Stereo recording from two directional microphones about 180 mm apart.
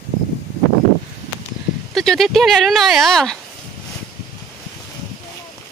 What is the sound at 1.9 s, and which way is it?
Speech, centre (ahead or behind).